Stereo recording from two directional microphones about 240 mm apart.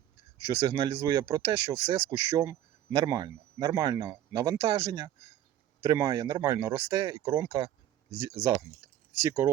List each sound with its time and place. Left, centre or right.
0.3 s speech: centre